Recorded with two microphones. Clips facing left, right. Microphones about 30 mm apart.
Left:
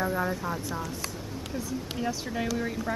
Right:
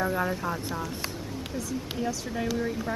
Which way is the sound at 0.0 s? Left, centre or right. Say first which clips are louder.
Right 1 dB; centre.